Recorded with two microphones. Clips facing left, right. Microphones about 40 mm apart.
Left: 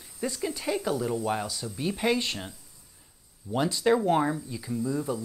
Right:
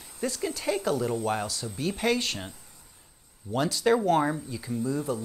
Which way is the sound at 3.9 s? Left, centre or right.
Centre.